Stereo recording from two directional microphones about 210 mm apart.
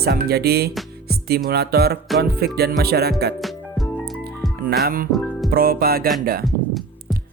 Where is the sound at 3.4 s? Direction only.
Centre (ahead or behind).